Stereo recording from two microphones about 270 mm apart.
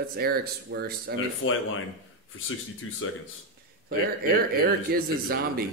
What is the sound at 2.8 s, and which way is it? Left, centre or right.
Speech, left.